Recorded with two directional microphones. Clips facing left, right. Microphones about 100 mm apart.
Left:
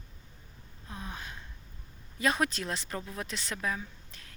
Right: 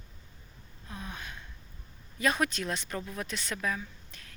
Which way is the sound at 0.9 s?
25° left (ahead or behind).